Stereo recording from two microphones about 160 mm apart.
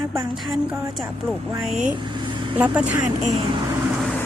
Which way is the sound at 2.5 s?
10° right (ahead or behind).